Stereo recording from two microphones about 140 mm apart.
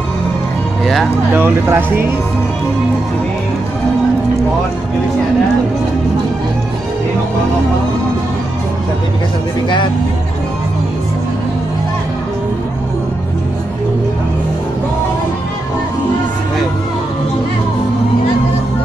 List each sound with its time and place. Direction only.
1.3 s speech: 15° right (ahead or behind)